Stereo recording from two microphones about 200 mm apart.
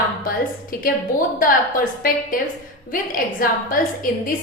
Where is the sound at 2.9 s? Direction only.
45° left (ahead or behind).